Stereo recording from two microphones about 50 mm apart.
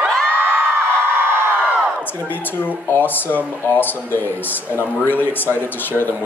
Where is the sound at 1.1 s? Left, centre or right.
Right.